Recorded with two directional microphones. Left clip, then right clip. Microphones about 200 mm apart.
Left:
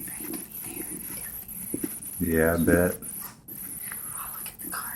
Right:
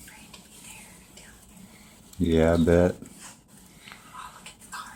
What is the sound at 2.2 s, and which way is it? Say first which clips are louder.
Speech: right 2 dB; 45° right (ahead or behind).